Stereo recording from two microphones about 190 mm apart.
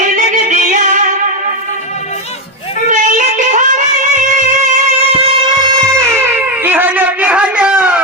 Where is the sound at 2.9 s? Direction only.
40° right (ahead or behind).